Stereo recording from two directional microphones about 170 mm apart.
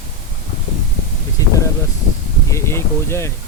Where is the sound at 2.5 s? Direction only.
15° left (ahead or behind).